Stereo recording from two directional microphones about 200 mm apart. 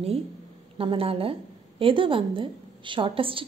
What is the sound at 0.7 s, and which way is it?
A woman's voice, 25° right (ahead or behind).